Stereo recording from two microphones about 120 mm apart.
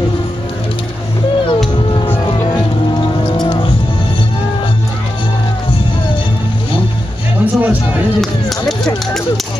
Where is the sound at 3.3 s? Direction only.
35° left (ahead or behind).